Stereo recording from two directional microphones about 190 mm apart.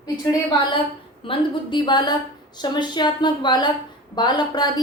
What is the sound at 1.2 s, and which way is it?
A woman's voice, 25° left (ahead or behind).